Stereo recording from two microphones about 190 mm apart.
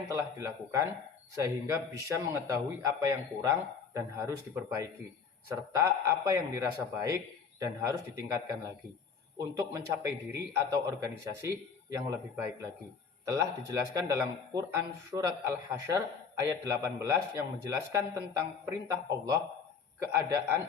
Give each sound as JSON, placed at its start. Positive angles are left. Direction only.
{"t": 0.1, "sound": "speech", "side_deg": -15}
{"t": 9.7, "sound": "speech", "side_deg": -15}